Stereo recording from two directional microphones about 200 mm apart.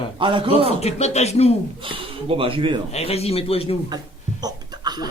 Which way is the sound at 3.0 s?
30° left (ahead or behind).